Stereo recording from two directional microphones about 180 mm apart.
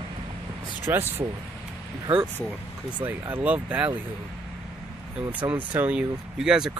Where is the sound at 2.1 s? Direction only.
30° right (ahead or behind).